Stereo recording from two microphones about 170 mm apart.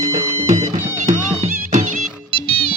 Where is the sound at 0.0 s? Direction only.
40° right (ahead or behind).